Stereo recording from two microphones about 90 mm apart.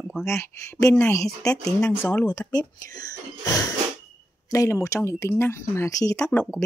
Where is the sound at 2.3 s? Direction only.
40° left (ahead or behind).